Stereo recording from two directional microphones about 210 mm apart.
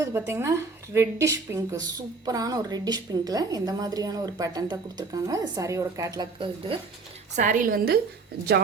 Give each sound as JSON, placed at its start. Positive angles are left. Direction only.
{"t": 0.0, "sound": "a woman's voice", "side_deg": -15}
{"t": 7.3, "sound": "a woman's voice", "side_deg": -40}